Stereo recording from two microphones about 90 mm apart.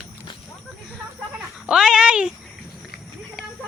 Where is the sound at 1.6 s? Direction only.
5° right (ahead or behind).